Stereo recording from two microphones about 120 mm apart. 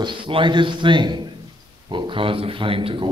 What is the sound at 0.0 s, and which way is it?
Speech, 40° right (ahead or behind).